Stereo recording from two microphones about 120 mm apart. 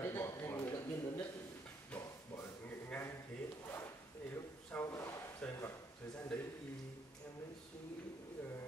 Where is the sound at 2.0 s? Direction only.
20° left (ahead or behind).